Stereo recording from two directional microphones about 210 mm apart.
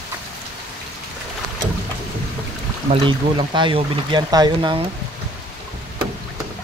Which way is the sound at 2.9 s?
25° right (ahead or behind).